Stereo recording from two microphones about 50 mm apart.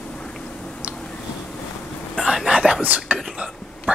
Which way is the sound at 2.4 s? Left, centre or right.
Centre.